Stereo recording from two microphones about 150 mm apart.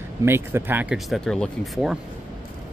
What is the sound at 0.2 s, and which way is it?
Speech, 15° right (ahead or behind).